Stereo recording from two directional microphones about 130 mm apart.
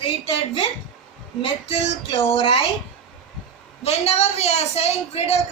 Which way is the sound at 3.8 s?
55° left (ahead or behind).